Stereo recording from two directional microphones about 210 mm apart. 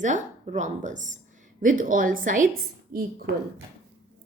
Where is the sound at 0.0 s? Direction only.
35° right (ahead or behind).